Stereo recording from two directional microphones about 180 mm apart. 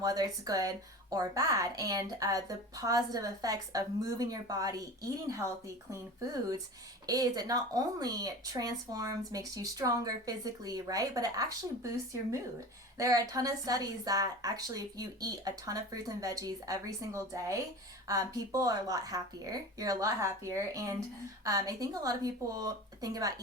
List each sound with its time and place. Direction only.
0.0 s speech: 20° right (ahead or behind)
7.1 s speech: 20° right (ahead or behind)
13.0 s speech: 20° right (ahead or behind)